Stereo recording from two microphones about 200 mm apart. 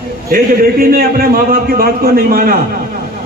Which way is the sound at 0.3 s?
45° right (ahead or behind).